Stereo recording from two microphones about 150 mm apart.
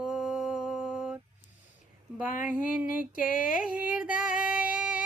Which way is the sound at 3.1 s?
65° left (ahead or behind).